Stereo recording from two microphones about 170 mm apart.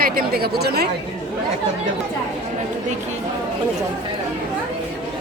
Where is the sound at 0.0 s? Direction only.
65° right (ahead or behind).